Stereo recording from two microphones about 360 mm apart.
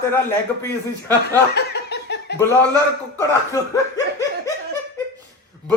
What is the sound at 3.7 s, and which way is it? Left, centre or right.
Laughter, centre.